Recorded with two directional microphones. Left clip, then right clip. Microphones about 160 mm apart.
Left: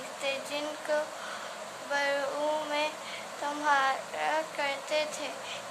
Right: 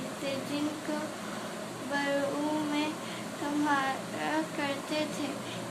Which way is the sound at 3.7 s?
25° left (ahead or behind).